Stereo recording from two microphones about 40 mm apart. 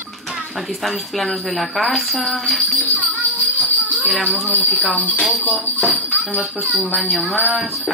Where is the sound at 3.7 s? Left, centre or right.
Left.